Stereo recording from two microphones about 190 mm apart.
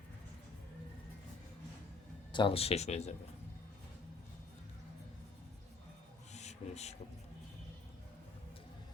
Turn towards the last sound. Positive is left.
turn(degrees=35)  # may be behind; listen again after turning